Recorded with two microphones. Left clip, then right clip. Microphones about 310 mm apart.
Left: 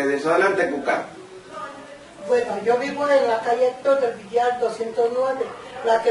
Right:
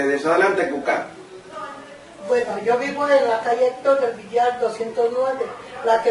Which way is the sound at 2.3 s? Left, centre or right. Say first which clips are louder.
Even; centre.